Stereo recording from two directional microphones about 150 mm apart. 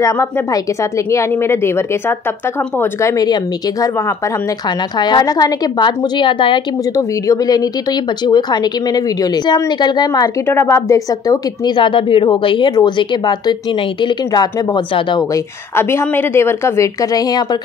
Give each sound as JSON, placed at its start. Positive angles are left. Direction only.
{"t": 1.1, "sound": "a woman's voice", "side_deg": 15}
{"t": 4.9, "sound": "a woman's voice", "side_deg": 30}
{"t": 15.7, "sound": "a woman's voice", "side_deg": 15}